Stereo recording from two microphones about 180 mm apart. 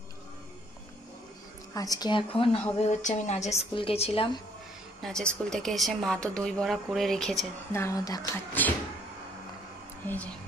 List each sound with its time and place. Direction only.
1.7 s speech: 20° left (ahead or behind)
2.8 s speech: 40° left (ahead or behind)
5.0 s speech: 5° left (ahead or behind)
7.7 s speech: 15° left (ahead or behind)
10.0 s speech: 10° left (ahead or behind)